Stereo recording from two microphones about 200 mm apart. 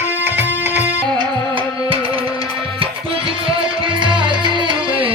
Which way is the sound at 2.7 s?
25° right (ahead or behind).